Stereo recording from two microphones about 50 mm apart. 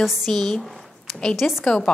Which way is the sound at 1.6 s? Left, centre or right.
Centre.